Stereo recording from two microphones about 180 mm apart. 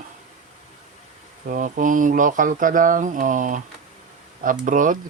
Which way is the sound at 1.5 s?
50° right (ahead or behind).